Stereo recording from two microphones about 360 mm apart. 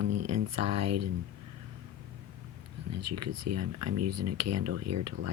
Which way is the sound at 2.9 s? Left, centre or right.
Right.